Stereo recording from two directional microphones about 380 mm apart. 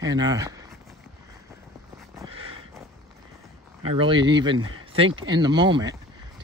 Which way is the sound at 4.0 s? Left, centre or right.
Centre.